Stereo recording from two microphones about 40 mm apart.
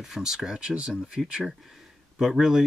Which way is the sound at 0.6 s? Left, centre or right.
Right.